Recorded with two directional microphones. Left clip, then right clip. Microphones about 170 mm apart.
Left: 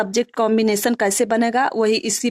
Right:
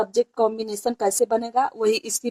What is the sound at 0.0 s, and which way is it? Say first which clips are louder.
Speech: left 1 dB; 35° left (ahead or behind).